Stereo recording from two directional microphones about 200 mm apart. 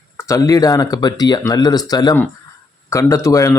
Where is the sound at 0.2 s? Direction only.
15° left (ahead or behind).